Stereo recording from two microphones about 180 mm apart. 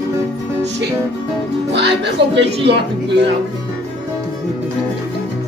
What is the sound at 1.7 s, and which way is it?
Speech, 75° right (ahead or behind).